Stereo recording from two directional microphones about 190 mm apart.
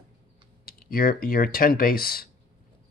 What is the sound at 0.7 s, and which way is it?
Speech, 50° left (ahead or behind).